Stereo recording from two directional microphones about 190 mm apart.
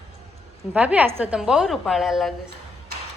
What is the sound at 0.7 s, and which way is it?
A woman's voice, 5° right (ahead or behind).